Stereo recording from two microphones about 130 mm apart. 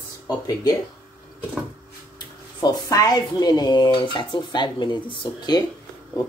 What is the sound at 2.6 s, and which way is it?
Speech, 30° left (ahead or behind).